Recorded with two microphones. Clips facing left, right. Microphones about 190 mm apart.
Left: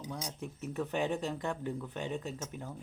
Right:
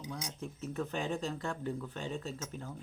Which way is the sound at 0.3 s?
15° left (ahead or behind).